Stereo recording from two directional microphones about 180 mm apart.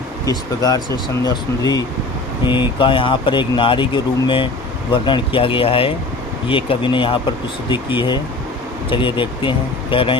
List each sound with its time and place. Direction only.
0.3 s speech: 20° left (ahead or behind)